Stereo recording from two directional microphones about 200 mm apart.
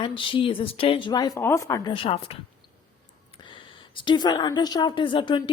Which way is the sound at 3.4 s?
25° left (ahead or behind).